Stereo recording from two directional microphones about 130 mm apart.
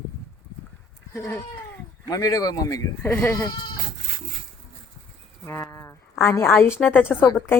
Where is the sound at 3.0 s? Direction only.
10° left (ahead or behind).